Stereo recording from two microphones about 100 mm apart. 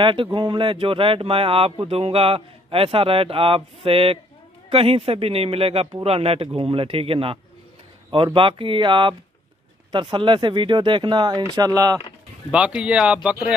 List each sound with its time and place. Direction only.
0.0 s speech: 60° right (ahead or behind); by 12.0 s 35° right (ahead or behind)
12.4 s speech: 10° right (ahead or behind)